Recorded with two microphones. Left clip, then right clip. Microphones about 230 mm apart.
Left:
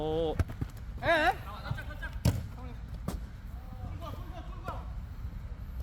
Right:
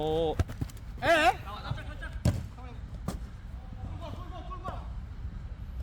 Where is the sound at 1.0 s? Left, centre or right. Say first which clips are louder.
Right 3 dB; right.